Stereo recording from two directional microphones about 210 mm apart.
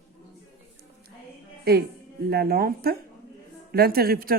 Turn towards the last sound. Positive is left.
turn(degrees=-45)  # may be behind; listen again after turning